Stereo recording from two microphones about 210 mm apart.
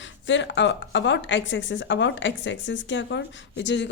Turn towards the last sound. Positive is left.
turn(degrees=60)  # may be behind; listen again after turning